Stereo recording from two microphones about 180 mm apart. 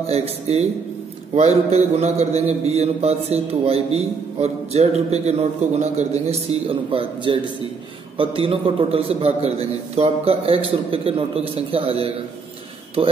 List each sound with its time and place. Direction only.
0.0 s a man's voice: 35° right (ahead or behind)